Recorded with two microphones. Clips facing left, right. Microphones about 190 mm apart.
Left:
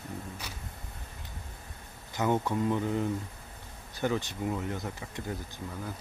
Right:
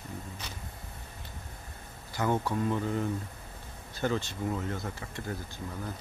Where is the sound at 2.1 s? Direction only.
20° left (ahead or behind).